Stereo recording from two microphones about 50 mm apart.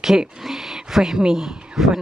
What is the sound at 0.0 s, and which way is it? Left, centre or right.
Speech, centre.